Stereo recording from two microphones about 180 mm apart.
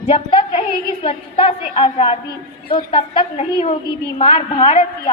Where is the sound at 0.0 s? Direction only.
30° left (ahead or behind).